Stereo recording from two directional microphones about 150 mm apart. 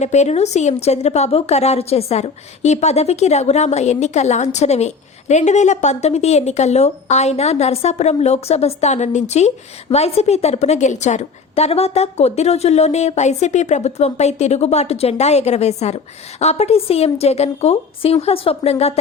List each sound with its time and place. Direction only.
0.0 s a woman's voice: 50° left (ahead or behind)